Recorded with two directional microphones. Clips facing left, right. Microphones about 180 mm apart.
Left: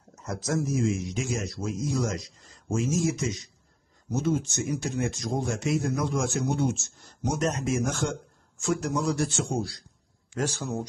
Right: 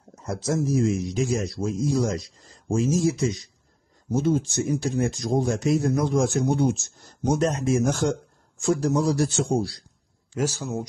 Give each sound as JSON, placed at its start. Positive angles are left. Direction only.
{"t": 0.1, "sound": "speech", "side_deg": -30}
{"t": 10.3, "sound": "speech", "side_deg": -10}